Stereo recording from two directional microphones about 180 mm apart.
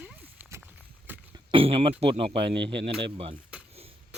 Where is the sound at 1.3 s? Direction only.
30° right (ahead or behind).